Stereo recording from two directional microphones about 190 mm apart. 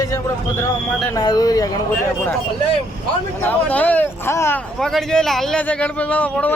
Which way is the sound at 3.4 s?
10° left (ahead or behind).